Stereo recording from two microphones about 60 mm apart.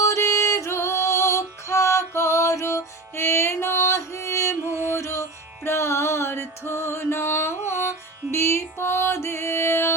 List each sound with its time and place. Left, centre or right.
0.0 s music: left